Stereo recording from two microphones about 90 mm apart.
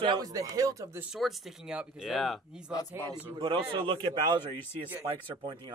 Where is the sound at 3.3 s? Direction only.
75° right (ahead or behind).